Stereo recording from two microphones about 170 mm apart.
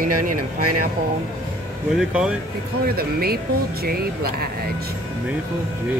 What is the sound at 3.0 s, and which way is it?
Speech, 65° right (ahead or behind).